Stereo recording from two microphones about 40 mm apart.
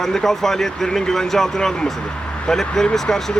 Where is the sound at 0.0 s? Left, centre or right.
Centre.